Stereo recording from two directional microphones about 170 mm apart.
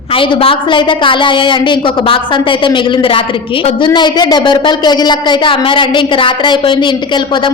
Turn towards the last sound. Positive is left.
turn(degrees=25)  # may be behind; listen again after turning